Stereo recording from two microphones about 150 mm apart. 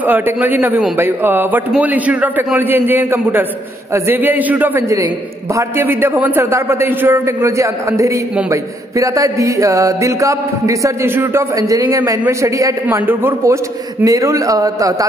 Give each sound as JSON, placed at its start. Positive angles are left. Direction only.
{"t": 0.0, "sound": "a man's voice", "side_deg": -10}
{"t": 8.5, "sound": "music", "side_deg": -20}
{"t": 12.8, "sound": "a man's voice", "side_deg": -15}
{"t": 14.0, "sound": "music", "side_deg": -20}